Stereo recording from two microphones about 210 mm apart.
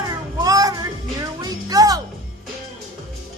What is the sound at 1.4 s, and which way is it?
Music, 15° right (ahead or behind).